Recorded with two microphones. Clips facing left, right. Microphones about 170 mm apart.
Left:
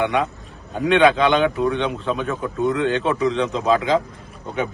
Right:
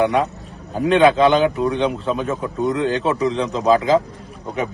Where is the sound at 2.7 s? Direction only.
35° right (ahead or behind).